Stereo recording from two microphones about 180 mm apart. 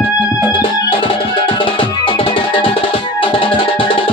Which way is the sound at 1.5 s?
30° left (ahead or behind).